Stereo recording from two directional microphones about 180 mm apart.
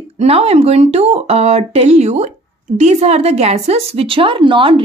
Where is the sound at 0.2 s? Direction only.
35° right (ahead or behind).